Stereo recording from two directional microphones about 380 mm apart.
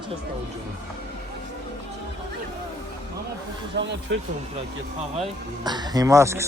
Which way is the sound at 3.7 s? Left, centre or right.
Right.